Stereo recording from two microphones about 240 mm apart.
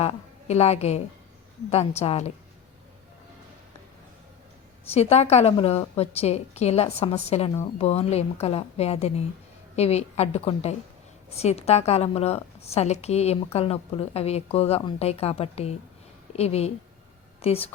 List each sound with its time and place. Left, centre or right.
0.0 s a woman's voice: left
4.9 s a woman's voice: left